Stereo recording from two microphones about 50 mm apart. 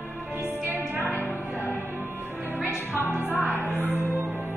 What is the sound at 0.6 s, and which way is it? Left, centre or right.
Music, right.